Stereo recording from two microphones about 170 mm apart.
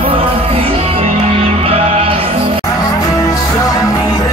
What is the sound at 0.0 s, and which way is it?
Music, 30° right (ahead or behind).